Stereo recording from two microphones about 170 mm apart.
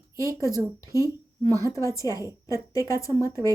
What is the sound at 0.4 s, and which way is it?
A woman's voice, 20° left (ahead or behind).